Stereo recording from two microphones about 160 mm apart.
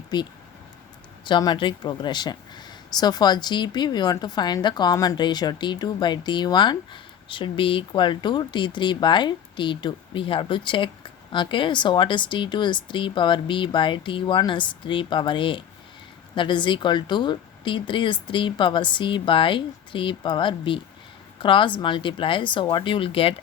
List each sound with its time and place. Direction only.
0.1 s speech: 25° left (ahead or behind)